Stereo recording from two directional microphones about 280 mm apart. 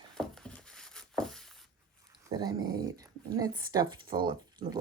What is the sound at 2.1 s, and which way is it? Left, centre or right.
Speech, centre.